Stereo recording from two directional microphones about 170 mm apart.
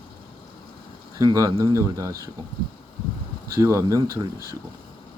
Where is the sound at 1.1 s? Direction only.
20° right (ahead or behind).